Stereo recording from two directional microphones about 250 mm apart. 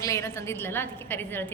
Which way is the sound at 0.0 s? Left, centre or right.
Centre.